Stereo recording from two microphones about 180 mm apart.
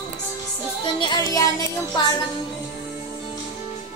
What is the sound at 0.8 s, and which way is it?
Music, 20° left (ahead or behind).